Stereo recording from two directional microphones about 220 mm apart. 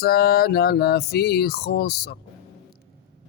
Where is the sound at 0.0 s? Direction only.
45° left (ahead or behind).